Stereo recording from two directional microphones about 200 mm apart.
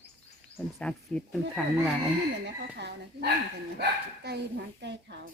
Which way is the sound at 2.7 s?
55° right (ahead or behind).